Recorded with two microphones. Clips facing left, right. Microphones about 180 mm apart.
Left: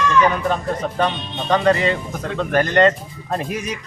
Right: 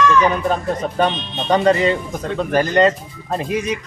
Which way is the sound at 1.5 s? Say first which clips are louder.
Right 2 dB; 20° right (ahead or behind).